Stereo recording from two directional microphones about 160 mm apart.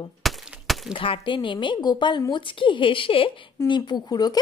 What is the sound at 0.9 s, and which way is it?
A woman's voice, 35° left (ahead or behind).